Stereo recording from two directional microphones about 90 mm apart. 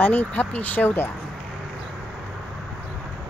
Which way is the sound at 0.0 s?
15° left (ahead or behind).